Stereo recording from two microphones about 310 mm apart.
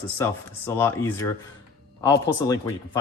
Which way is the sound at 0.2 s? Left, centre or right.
Centre.